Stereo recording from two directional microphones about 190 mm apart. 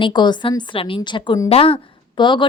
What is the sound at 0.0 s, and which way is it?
A woman's voice, 25° left (ahead or behind).